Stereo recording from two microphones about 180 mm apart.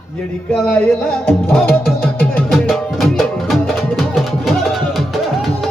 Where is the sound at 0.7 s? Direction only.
10° left (ahead or behind).